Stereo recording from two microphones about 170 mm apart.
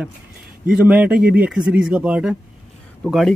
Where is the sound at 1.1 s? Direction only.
60° right (ahead or behind).